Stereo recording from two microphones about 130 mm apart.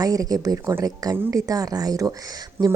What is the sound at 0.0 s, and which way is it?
A woman's voice, 30° right (ahead or behind).